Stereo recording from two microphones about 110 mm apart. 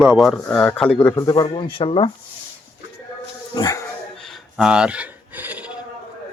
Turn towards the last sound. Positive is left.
turn(degrees=-15)  # may be behind; listen again after turning